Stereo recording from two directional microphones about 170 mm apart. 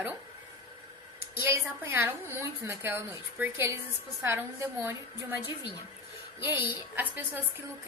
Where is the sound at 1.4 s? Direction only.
15° right (ahead or behind).